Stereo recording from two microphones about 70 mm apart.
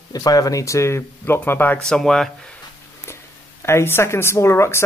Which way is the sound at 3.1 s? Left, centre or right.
Left.